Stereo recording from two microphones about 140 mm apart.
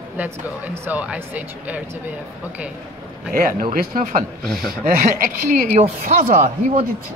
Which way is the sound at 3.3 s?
90° right.